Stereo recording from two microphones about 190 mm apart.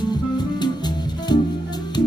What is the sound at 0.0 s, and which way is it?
Music, 20° left (ahead or behind).